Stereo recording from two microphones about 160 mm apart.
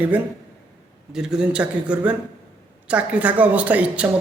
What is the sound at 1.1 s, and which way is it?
A man's voice, 5° right (ahead or behind).